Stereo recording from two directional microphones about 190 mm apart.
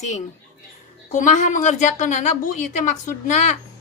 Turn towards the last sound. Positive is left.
turn(degrees=40)  # may be behind; listen again after turning